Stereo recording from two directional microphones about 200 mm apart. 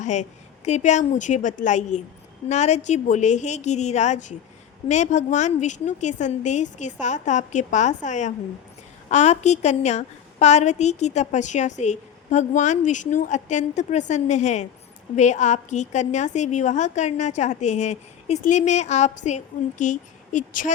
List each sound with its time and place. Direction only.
0.0 s a woman's voice: 35° left (ahead or behind)